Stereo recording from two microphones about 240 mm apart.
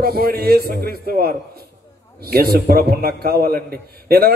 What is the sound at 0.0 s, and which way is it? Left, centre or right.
A man's voice, right.